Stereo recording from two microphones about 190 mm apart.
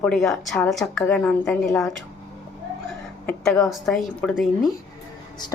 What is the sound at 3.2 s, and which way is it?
Speech, 5° left (ahead or behind).